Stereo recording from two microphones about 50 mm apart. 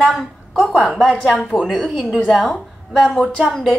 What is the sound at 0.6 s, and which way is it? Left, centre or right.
A woman's voice, centre.